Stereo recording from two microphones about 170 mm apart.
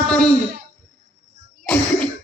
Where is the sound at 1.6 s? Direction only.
10° left (ahead or behind).